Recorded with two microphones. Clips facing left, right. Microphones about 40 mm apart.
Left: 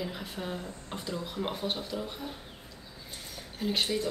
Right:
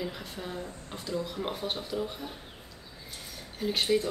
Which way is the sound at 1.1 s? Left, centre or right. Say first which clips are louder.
Right 2 dB; centre.